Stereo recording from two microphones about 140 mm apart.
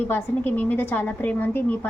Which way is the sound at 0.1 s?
15° left (ahead or behind).